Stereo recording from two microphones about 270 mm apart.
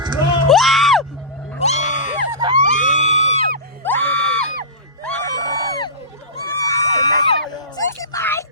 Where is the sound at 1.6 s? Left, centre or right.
Left.